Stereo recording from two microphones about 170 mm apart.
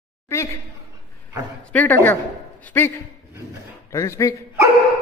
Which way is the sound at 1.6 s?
10° left (ahead or behind).